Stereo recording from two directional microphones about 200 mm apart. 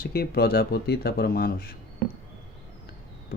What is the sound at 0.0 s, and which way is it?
Speech, 50° left (ahead or behind).